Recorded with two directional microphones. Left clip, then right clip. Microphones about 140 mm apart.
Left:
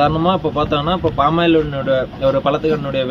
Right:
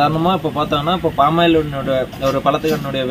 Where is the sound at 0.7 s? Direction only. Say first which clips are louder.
Even; 30° left (ahead or behind).